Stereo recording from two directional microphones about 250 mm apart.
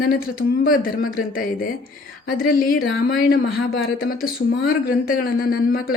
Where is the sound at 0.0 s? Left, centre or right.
Left.